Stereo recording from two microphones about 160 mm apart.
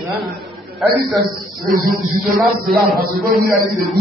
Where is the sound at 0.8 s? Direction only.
Centre (ahead or behind).